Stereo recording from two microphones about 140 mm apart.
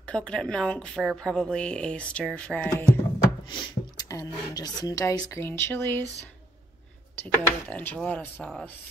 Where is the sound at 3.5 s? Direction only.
35° left (ahead or behind); by 6.1 s 15° left (ahead or behind).